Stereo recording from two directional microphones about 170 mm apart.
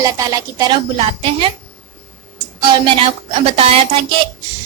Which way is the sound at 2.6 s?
30° right (ahead or behind).